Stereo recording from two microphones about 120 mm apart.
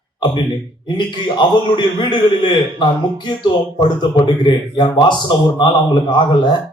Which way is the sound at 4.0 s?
40° left (ahead or behind).